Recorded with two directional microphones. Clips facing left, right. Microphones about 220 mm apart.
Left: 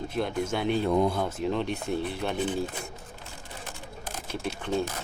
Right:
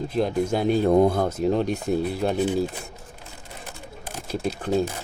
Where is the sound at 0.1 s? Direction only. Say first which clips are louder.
Right 6 dB; 35° right (ahead or behind).